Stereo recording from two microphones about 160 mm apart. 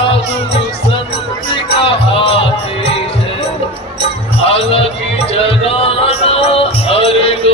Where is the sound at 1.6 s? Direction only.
35° left (ahead or behind).